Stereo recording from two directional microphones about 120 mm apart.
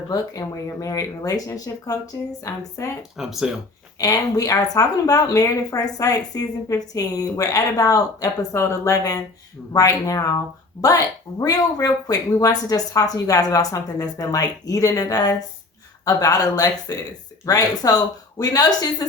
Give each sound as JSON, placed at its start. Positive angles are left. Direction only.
{"t": 0.1, "sound": "speech", "side_deg": 30}
{"t": 3.2, "sound": "speech", "side_deg": -5}
{"t": 3.9, "sound": "speech", "side_deg": 30}